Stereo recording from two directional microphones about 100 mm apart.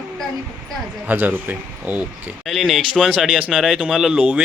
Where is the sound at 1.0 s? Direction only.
20° right (ahead or behind).